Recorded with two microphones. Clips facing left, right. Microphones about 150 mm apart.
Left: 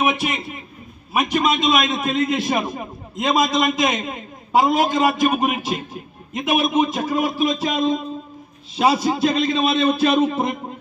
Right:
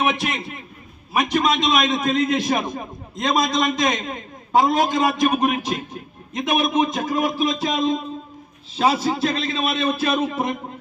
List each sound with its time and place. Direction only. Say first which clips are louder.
0.0 s a man's voice: left 1 dB; 5° left (ahead or behind)